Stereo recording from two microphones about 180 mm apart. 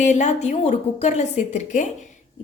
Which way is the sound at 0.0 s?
40° left (ahead or behind).